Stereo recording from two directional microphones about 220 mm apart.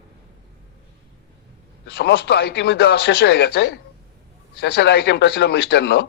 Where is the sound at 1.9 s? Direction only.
50° left (ahead or behind).